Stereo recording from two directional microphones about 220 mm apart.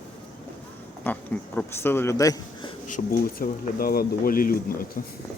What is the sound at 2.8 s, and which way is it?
Speech, 35° left (ahead or behind).